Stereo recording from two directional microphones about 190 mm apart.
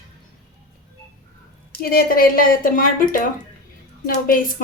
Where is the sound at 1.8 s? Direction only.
50° left (ahead or behind).